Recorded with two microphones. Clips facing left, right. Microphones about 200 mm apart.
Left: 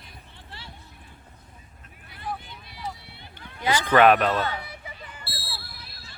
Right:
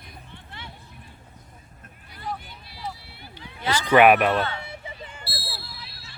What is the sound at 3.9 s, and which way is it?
Speech, 10° right (ahead or behind).